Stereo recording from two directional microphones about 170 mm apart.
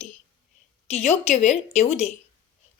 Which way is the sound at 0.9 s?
40° left (ahead or behind).